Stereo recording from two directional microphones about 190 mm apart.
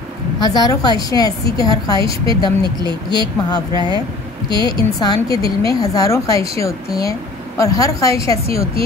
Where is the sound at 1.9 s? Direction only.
25° right (ahead or behind).